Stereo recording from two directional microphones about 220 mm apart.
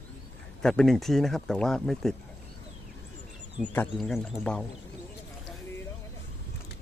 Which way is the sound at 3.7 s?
5° left (ahead or behind).